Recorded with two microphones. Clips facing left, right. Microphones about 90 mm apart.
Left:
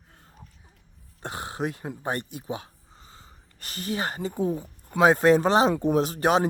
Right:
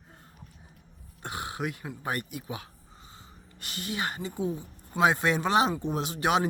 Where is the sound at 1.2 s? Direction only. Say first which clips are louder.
Left 3 dB; 35° left (ahead or behind).